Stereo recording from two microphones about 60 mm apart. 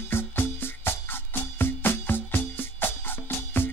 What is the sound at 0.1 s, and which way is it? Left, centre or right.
Music, left.